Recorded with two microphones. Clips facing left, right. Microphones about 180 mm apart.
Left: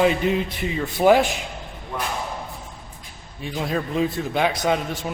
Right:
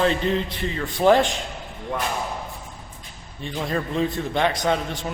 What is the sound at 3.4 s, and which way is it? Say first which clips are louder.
A man's voice: left 1 dB; 5° left (ahead or behind).